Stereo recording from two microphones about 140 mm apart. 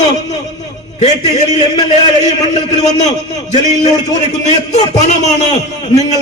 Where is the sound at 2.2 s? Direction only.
55° left (ahead or behind).